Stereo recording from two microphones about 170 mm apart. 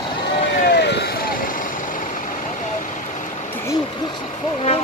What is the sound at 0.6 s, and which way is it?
Vehicle, 75° left (ahead or behind).